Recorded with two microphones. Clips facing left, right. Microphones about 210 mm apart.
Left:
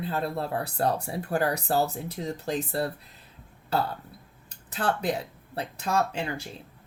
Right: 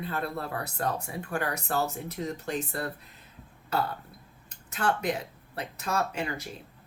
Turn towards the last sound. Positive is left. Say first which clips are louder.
# left 3 dB
turn(degrees=30)  # may be behind; listen again after turning